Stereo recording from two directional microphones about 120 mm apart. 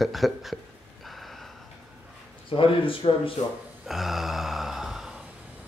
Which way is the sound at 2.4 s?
45° left (ahead or behind).